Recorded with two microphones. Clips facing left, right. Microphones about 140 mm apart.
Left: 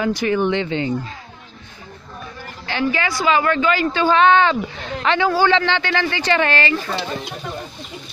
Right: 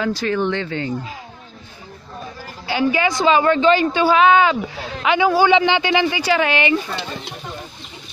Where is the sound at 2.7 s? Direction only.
15° right (ahead or behind).